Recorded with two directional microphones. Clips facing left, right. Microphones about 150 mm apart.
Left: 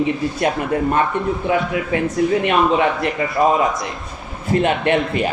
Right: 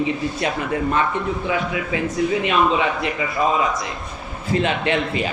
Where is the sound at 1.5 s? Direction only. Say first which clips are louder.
Left 4 dB; 50° left (ahead or behind).